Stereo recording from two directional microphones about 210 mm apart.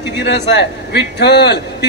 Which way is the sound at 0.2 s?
55° left (ahead or behind).